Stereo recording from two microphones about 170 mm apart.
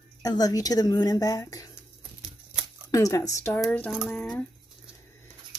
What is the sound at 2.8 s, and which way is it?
Speech, 20° left (ahead or behind).